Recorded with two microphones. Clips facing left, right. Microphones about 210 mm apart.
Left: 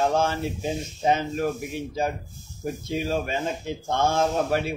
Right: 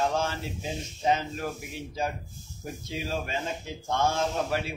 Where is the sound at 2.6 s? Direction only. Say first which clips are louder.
Left 7 dB; 50° left (ahead or behind).